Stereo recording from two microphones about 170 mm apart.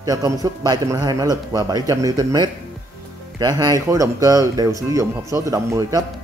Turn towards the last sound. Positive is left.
turn(degrees=-20)  # may be behind; listen again after turning